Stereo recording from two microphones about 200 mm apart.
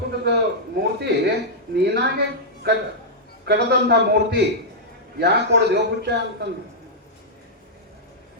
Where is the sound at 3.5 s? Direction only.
55° right (ahead or behind).